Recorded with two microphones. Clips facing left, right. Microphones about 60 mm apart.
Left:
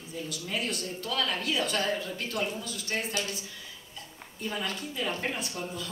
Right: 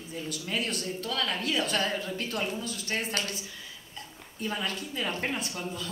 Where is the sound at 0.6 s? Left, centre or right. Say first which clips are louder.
Right 1 dB; right.